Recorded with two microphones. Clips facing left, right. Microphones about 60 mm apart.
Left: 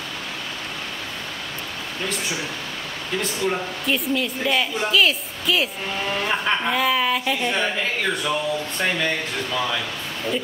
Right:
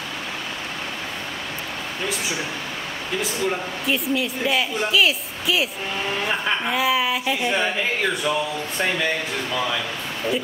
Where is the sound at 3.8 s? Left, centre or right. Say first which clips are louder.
Right 1 dB; centre.